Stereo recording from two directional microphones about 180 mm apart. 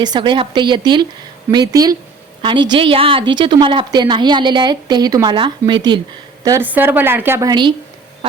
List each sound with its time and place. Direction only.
0.0 s a woman's voice: 25° right (ahead or behind)
6.4 s a woman's voice: 15° right (ahead or behind)